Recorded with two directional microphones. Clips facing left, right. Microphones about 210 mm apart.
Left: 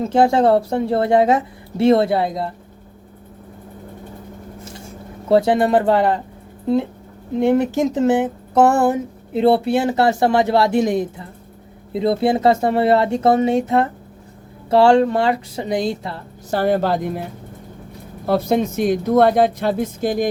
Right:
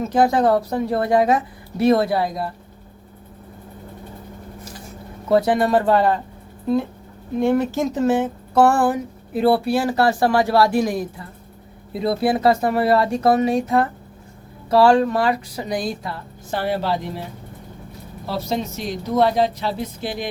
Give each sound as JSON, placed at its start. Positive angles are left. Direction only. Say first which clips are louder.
{"t": 0.0, "sound": "speech", "louder": "left 2 dB", "side_deg": 25}
{"t": 5.3, "sound": "speech", "louder": "left 2 dB", "side_deg": 25}
{"t": 7.3, "sound": "speech", "louder": "left 2 dB", "side_deg": 20}
{"t": 16.5, "sound": "speech", "louder": "left 5 dB", "side_deg": 45}
{"t": 18.3, "sound": "speech", "louder": "left 7 dB", "side_deg": 55}